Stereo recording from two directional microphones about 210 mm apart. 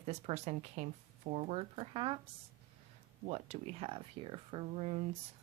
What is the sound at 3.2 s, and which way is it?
Speech, 30° right (ahead or behind).